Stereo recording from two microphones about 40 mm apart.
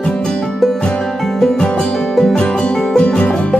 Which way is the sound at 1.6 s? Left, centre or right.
Left.